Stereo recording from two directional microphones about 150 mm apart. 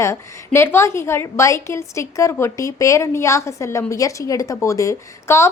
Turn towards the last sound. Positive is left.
turn(degrees=20)  # may be behind; listen again after turning